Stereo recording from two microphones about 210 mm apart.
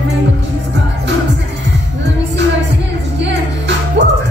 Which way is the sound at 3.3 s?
55° right (ahead or behind).